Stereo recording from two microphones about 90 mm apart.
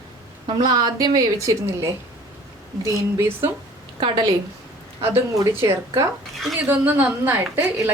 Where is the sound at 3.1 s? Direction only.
30° right (ahead or behind).